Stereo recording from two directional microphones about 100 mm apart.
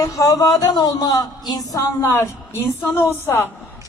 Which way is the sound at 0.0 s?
35° left (ahead or behind).